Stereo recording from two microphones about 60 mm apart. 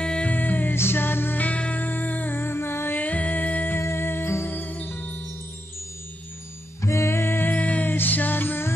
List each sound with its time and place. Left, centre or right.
0.0 s music: centre
0.7 s music: left
1.4 s music: left
3.0 s music: left
3.7 s music: left
6.8 s music: left
7.5 s music: left